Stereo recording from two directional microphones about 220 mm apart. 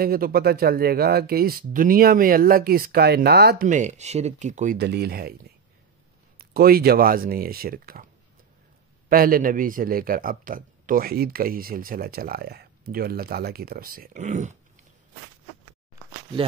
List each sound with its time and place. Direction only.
0.0 s a man's voice: 40° right (ahead or behind)
4.7 s speech: 45° right (ahead or behind)
9.1 s a man's voice: 40° right (ahead or behind)